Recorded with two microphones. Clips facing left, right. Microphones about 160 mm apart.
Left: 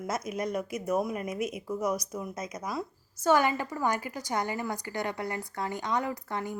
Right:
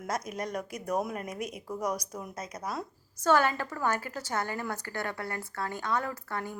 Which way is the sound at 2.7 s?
Centre (ahead or behind).